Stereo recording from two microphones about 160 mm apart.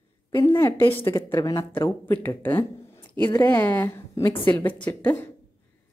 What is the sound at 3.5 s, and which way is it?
Speech, 15° left (ahead or behind).